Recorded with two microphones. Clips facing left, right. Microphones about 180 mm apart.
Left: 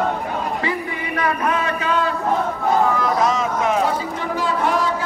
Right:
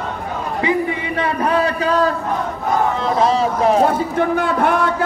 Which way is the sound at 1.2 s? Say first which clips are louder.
Right 3 dB; 30° right (ahead or behind).